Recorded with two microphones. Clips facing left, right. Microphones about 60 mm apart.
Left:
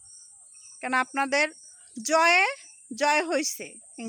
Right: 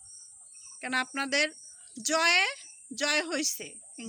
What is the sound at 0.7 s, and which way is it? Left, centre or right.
Speech, left.